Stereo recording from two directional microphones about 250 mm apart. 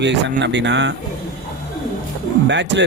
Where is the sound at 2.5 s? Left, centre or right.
Right.